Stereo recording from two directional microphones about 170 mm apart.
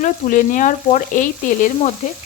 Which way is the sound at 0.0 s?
50° left (ahead or behind).